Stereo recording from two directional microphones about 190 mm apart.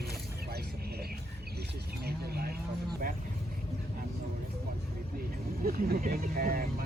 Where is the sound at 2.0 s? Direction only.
55° right (ahead or behind).